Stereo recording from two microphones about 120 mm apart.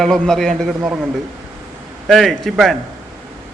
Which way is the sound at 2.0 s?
Centre (ahead or behind).